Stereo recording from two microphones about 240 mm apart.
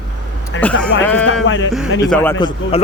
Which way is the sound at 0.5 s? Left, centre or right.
Left.